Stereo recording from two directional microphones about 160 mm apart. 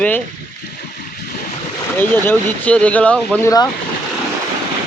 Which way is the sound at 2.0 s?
10° left (ahead or behind).